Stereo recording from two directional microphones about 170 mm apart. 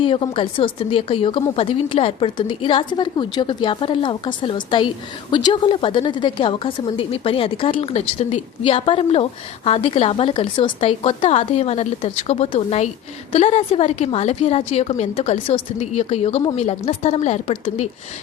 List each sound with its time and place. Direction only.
0.0 s a woman's voice: 30° left (ahead or behind)